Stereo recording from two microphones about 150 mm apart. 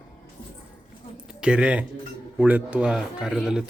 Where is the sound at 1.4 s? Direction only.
5° right (ahead or behind).